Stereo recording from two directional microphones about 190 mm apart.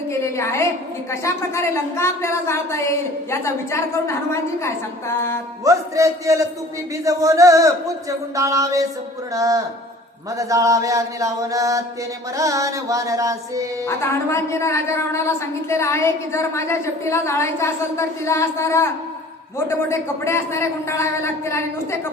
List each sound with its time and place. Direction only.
0.1 s a woman's voice: 15° left (ahead or behind)
5.6 s mantra: 15° right (ahead or behind)
13.8 s a woman's voice: 15° left (ahead or behind)